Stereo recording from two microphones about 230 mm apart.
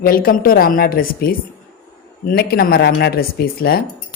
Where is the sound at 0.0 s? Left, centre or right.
Left.